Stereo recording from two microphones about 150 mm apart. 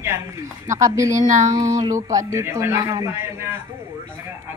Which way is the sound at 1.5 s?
25° right (ahead or behind).